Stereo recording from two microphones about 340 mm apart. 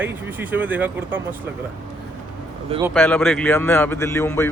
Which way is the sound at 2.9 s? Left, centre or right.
Centre.